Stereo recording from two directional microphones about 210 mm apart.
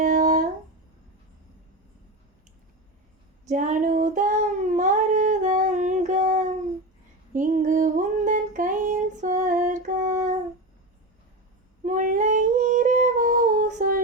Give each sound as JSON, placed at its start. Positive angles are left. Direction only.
{"t": 0.0, "sound": "a sound", "side_deg": -40}
{"t": 3.5, "sound": "child singing", "side_deg": -35}
{"t": 7.3, "sound": "music", "side_deg": -40}
{"t": 11.9, "sound": "humming", "side_deg": -40}